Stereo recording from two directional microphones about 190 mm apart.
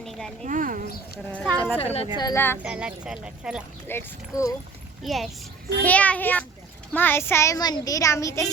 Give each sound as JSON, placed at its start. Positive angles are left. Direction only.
{"t": 0.0, "sound": "a sound", "side_deg": 0}
{"t": 0.4, "sound": "speech", "side_deg": -45}
{"t": 1.3, "sound": "speech", "side_deg": 5}
{"t": 2.1, "sound": "speech", "side_deg": 15}
{"t": 2.6, "sound": "speech", "side_deg": -5}
{"t": 3.8, "sound": "speech", "side_deg": 15}
{"t": 5.0, "sound": "speech", "side_deg": 0}